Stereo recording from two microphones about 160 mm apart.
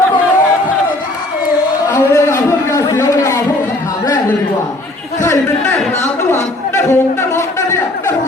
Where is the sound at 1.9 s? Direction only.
15° left (ahead or behind).